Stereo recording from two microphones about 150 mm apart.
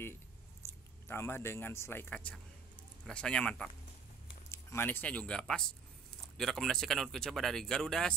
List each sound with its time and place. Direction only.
0.6 s a sound: 20° left (ahead or behind)
1.0 s speech: 15° left (ahead or behind)
4.5 s speech: 15° left (ahead or behind)